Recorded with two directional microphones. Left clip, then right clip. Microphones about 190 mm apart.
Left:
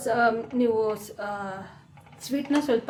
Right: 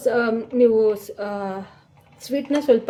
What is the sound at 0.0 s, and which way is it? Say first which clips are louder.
Speech: right 3 dB; 45° right (ahead or behind).